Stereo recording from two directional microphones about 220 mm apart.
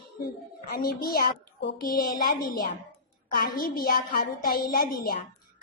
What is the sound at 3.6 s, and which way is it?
A child's voice, 40° left (ahead or behind).